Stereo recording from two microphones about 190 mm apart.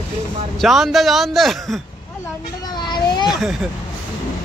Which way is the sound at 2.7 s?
20° left (ahead or behind).